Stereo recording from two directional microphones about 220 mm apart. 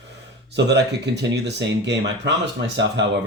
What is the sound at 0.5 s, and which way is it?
Speech, 50° right (ahead or behind).